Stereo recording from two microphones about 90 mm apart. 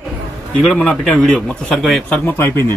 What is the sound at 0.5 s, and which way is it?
Speech, 10° left (ahead or behind).